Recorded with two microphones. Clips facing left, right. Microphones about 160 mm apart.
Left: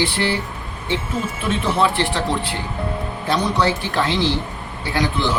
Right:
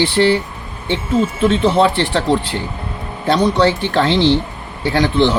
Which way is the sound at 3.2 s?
65° right (ahead or behind).